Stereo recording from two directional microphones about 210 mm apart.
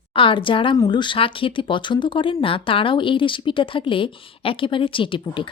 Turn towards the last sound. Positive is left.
turn(degrees=25)  # may be behind; listen again after turning